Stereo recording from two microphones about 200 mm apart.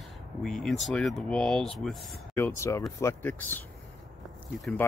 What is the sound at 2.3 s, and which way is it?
Speech, 15° left (ahead or behind).